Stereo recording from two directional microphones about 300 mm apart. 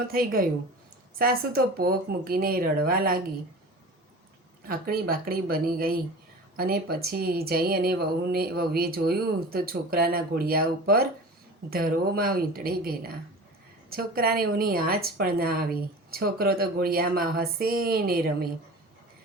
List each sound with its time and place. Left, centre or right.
0.1 s speech: right
4.7 s a woman's voice: right